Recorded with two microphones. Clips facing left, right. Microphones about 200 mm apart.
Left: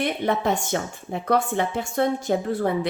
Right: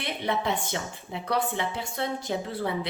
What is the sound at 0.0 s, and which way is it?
A woman's voice, 50° left (ahead or behind).